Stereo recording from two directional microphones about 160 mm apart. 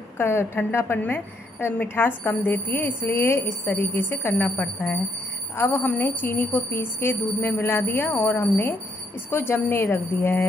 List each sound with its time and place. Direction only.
0.2 s a woman's voice: 15° left (ahead or behind)